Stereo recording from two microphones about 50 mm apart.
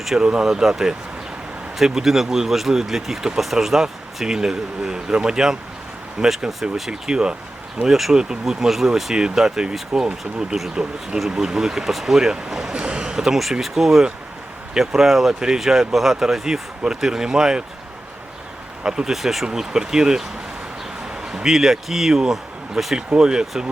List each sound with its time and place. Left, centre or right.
0.0 s speech: centre
7.1 s speech: centre
7.9 s speech: centre
18.8 s speech: centre
19.1 s speech: centre
21.3 s a man's voice: centre